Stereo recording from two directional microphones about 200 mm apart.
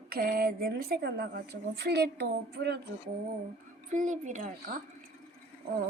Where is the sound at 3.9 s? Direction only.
40° right (ahead or behind).